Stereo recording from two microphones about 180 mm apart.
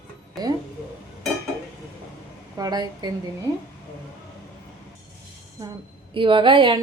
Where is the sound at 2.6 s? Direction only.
20° right (ahead or behind).